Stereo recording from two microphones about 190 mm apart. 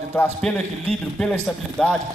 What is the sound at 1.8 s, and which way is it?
Speech, 5° left (ahead or behind).